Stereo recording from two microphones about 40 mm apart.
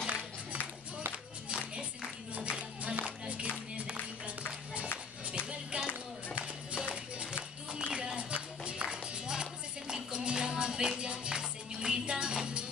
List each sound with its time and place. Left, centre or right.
0.0 s a sound: right
2.4 s music: right
3.0 s music: right
5.7 s music: right